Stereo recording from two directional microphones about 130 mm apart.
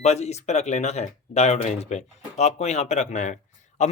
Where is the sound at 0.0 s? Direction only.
55° left (ahead or behind).